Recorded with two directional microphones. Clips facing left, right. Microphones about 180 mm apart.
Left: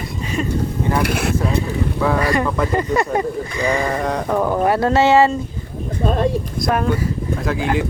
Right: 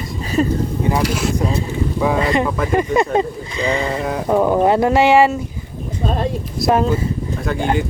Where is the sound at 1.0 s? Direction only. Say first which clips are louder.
Right 1 dB; 60° left (ahead or behind).